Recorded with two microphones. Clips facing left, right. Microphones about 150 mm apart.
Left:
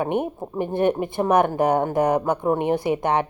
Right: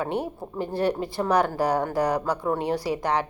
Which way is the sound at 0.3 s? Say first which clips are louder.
Left 4 dB; 20° left (ahead or behind).